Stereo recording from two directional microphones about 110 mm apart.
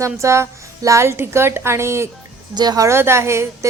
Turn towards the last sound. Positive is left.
turn(degrees=-25)  # may be behind; listen again after turning